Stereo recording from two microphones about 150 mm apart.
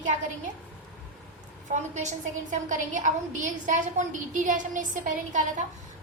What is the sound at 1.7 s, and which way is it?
A woman's voice, 50° right (ahead or behind).